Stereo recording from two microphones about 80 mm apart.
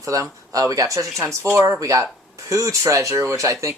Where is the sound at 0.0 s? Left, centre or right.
Right.